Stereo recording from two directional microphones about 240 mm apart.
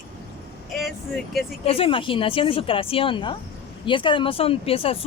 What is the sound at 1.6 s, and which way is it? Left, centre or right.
Speech, left.